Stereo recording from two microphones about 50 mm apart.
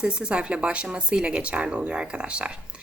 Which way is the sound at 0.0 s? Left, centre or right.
Centre.